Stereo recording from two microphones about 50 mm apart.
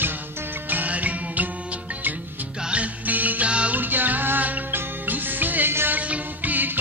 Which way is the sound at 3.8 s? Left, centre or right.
Right.